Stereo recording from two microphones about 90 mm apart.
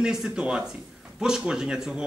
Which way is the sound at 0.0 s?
5° right (ahead or behind).